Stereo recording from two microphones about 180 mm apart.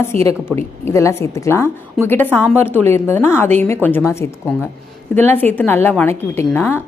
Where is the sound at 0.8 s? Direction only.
15° left (ahead or behind).